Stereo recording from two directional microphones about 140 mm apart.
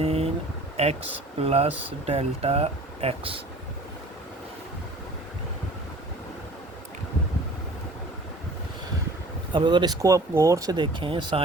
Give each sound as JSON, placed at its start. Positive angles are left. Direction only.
{"t": 0.0, "sound": "a sound", "side_deg": -45}
{"t": 0.8, "sound": "speech", "side_deg": -50}
{"t": 9.5, "sound": "speech", "side_deg": -35}